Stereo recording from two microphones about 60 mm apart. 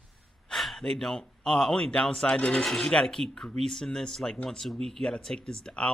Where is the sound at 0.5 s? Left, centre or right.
Centre.